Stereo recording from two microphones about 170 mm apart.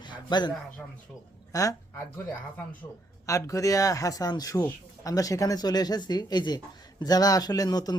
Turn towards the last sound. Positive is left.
turn(degrees=20)  # may be behind; listen again after turning